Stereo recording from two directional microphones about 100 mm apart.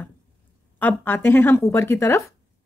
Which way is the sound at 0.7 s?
20° left (ahead or behind).